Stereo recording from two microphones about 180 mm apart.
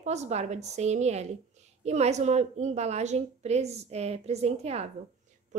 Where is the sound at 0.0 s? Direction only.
40° right (ahead or behind).